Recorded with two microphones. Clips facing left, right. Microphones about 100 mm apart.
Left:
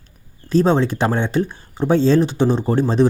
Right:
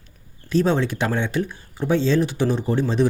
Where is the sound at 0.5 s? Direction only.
30° left (ahead or behind).